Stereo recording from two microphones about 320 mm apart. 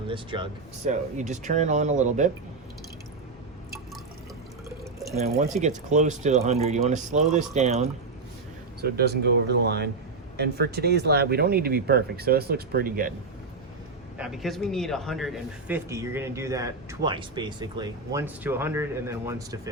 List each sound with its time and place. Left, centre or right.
0.1 s speech: centre
5.1 s speech: right
14.2 s a man's voice: centre